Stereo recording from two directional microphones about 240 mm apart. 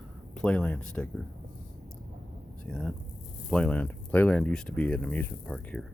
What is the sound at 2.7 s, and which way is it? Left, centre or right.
Speech, centre.